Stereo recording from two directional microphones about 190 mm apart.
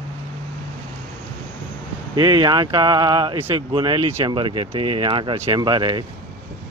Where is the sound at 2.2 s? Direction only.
25° right (ahead or behind).